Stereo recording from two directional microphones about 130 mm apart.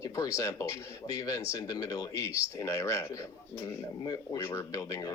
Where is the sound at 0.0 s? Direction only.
25° left (ahead or behind).